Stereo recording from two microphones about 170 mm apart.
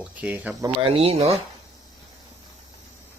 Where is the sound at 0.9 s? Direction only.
35° right (ahead or behind).